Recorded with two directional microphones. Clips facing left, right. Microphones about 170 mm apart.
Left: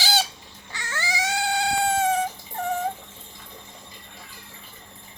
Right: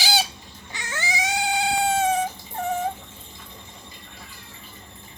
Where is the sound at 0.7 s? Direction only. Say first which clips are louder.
Even; 20° right (ahead or behind).